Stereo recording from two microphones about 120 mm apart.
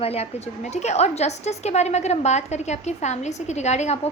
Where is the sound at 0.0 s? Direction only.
60° left (ahead or behind).